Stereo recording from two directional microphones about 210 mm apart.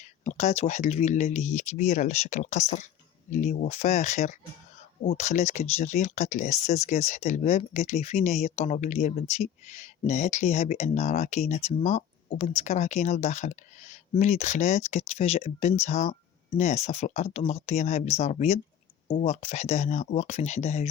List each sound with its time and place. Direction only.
0.0 s speech: 35° left (ahead or behind)